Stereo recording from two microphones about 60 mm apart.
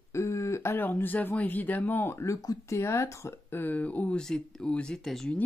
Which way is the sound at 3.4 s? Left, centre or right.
Left.